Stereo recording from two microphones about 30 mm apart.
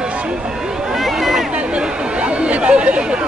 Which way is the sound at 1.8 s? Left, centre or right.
Right.